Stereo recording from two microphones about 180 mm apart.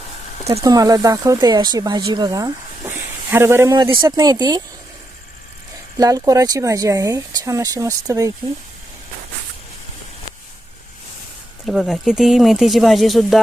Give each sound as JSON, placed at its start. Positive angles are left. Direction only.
{"t": 0.6, "sound": "speech", "side_deg": -20}
{"t": 6.0, "sound": "speech", "side_deg": -20}
{"t": 11.6, "sound": "speech", "side_deg": 0}